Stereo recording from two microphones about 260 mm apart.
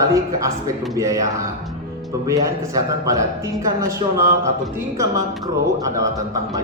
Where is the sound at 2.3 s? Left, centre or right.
Centre.